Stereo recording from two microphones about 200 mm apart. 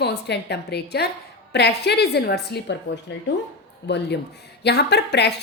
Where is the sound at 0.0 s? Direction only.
55° left (ahead or behind).